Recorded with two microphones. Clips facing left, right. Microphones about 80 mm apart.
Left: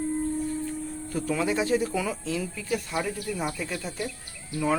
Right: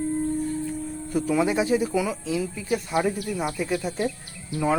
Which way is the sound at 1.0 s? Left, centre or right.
Centre.